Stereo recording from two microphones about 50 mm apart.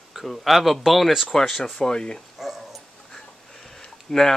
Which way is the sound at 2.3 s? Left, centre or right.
Centre.